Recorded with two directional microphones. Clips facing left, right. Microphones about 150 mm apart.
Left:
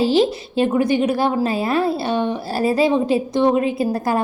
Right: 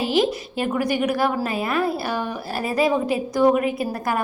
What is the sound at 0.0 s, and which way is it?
A woman's voice, 30° left (ahead or behind).